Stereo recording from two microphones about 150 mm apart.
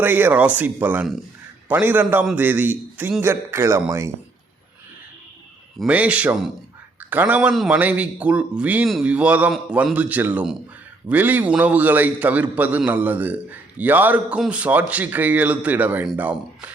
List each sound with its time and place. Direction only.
0.0 s a man's voice: 15° right (ahead or behind)
5.8 s a man's voice: 10° right (ahead or behind)